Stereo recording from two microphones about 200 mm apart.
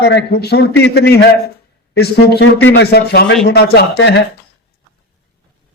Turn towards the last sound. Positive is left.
turn(degrees=55)  # may be behind; listen again after turning